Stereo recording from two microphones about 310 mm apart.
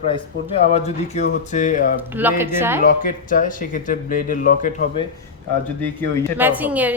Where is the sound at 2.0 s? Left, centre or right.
Centre.